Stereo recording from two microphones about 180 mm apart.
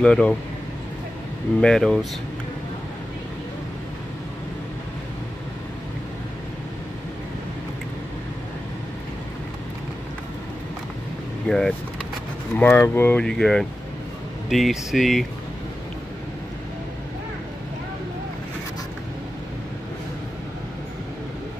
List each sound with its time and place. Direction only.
0.0 s speech: 5° left (ahead or behind)
1.6 s speech: 5° left (ahead or behind)
11.4 s speech: 5° left (ahead or behind)